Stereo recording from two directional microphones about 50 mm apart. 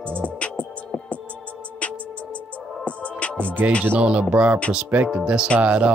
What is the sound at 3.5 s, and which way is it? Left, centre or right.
Music, right.